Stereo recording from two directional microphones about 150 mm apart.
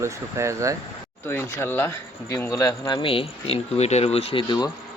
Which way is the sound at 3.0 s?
35° left (ahead or behind).